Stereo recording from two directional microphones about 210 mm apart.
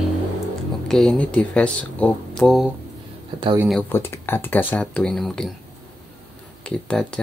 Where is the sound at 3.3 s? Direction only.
25° right (ahead or behind).